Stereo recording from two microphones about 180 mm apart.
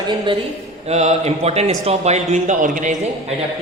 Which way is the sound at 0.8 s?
35° right (ahead or behind).